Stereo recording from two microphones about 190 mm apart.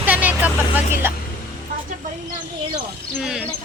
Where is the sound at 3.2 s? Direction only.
5° right (ahead or behind).